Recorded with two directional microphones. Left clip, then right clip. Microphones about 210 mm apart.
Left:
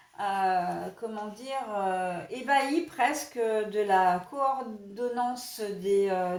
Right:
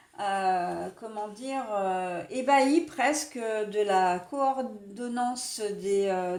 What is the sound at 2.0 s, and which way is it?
Speech, 45° right (ahead or behind).